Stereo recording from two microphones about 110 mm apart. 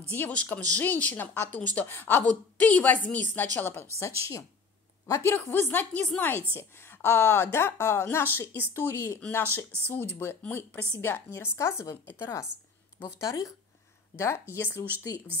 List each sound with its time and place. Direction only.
0.1 s a woman's voice: 15° left (ahead or behind)
5.0 s a woman's voice: 25° left (ahead or behind)